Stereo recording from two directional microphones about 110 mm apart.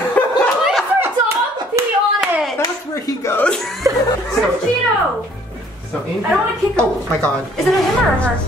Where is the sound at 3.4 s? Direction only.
5° left (ahead or behind).